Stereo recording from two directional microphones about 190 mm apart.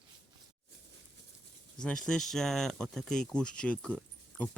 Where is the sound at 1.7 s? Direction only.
5° left (ahead or behind).